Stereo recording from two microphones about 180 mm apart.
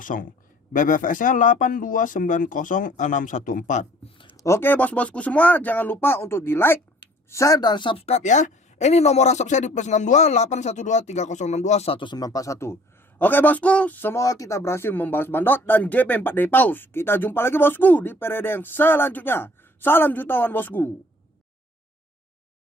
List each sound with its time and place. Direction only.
0.0 s a man's voice: 50° left (ahead or behind)
4.3 s a man's voice: 15° left (ahead or behind)